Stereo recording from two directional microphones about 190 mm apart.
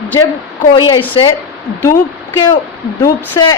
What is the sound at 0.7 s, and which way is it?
Speech, 25° left (ahead or behind).